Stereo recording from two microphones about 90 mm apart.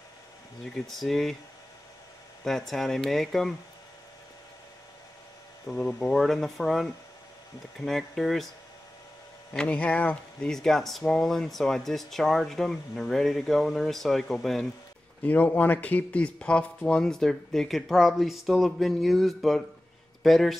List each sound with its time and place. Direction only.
0.7 s speech: centre (ahead or behind)
2.4 s speech: centre (ahead or behind)
5.7 s speech: 5° left (ahead or behind)
9.5 s speech: 15° left (ahead or behind)
15.2 s speech: 20° left (ahead or behind); by 20.5 s centre (ahead or behind)